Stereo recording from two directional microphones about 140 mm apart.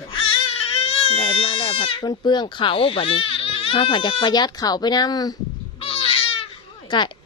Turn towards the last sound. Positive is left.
turn(degrees=35)  # may be behind; listen again after turning